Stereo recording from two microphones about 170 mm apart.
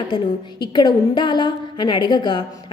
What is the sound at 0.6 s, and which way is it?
A woman's voice, 25° left (ahead or behind).